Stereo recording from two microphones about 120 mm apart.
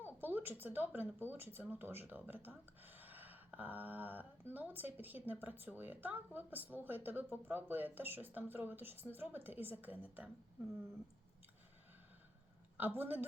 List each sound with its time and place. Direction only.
0.2 s speech: 15° right (ahead or behind)
12.7 s speech: 15° right (ahead or behind)